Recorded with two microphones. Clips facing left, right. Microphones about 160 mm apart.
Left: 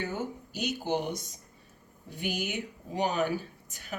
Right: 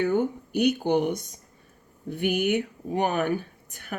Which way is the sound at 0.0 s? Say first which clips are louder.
Right 10 dB; 60° right (ahead or behind).